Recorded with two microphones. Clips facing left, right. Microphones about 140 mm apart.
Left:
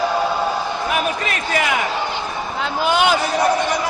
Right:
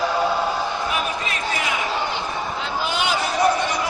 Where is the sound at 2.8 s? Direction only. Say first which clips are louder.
Left 8 dB; 60° left (ahead or behind).